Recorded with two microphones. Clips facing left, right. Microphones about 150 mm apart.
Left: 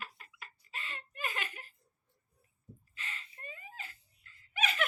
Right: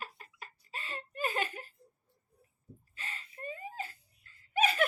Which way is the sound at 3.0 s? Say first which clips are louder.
Right 3 dB; 35° right (ahead or behind).